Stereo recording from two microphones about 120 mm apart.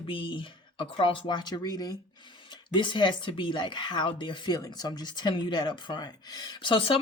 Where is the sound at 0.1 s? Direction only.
45° left (ahead or behind).